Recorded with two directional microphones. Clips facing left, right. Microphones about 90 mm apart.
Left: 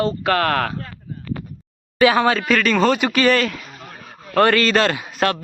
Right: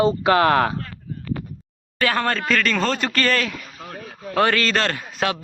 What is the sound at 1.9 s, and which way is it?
A man's voice, 10° left (ahead or behind).